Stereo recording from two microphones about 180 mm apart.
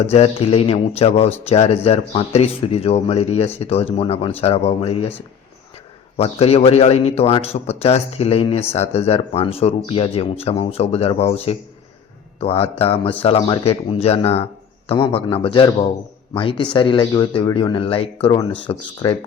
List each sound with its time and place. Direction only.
0.1 s speech: 35° left (ahead or behind)
6.1 s speech: 35° left (ahead or behind)